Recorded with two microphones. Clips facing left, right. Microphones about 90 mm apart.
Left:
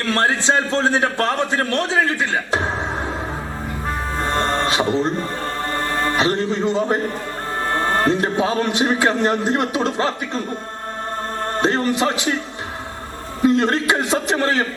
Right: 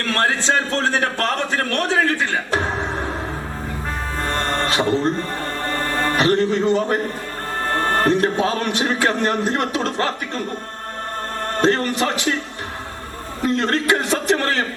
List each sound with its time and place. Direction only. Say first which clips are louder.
0.0 s a man's voice: left 1 dB; 20° left (ahead or behind)
4.2 s music: left 2 dB; 20° left (ahead or behind)
6.1 s a man's voice: right 5 dB; 20° left (ahead or behind)
11.5 s a man's voice: right 1 dB; 20° left (ahead or behind)
13.4 s a man's voice: left 3 dB; 20° left (ahead or behind)